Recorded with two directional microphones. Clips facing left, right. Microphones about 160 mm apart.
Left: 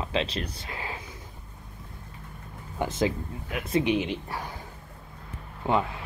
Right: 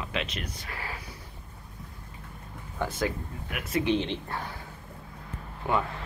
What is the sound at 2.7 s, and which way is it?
Speech, 20° left (ahead or behind).